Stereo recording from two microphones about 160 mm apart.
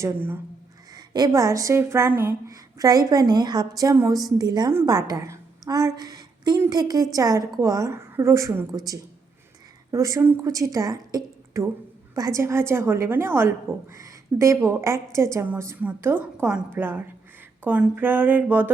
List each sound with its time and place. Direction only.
0.0 s a woman's voice: 15° right (ahead or behind)
0.9 s a woman's voice: 25° right (ahead or behind)